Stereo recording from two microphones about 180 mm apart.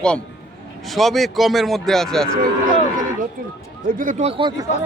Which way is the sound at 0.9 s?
Centre (ahead or behind).